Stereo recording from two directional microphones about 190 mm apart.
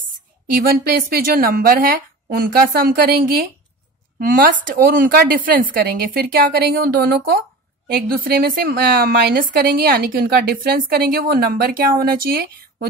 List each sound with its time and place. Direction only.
0.6 s a woman's voice: 50° right (ahead or behind)